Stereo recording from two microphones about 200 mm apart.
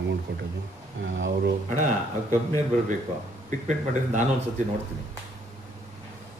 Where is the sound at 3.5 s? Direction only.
40° right (ahead or behind).